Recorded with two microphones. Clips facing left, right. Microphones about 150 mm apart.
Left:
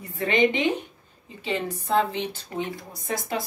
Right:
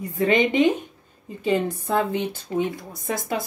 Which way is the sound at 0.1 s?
45° right (ahead or behind).